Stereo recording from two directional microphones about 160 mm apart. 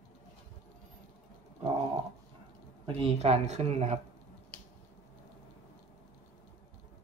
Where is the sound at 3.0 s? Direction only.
40° right (ahead or behind).